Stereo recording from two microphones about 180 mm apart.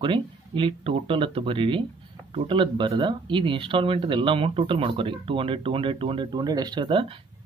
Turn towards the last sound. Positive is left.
turn(degrees=-30)  # may be behind; listen again after turning